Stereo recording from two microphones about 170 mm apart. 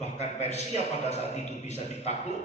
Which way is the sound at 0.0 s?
40° left (ahead or behind).